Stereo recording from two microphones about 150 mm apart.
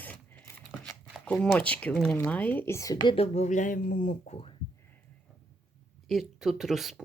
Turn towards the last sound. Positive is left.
turn(degrees=0)  # may be behind; listen again after turning